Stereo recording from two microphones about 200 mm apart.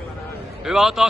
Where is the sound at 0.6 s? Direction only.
Centre (ahead or behind).